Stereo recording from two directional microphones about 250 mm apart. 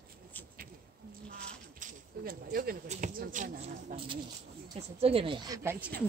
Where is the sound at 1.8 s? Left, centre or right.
Right.